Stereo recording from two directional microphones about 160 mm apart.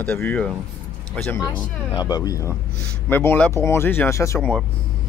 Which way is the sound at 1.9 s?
25° left (ahead or behind).